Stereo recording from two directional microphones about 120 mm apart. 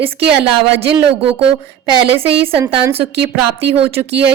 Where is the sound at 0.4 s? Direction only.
45° right (ahead or behind).